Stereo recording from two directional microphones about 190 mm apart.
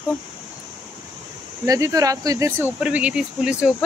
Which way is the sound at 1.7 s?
15° right (ahead or behind).